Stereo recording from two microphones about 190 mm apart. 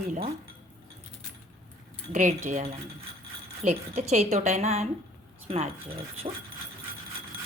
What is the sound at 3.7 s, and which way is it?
A woman's voice, 35° right (ahead or behind).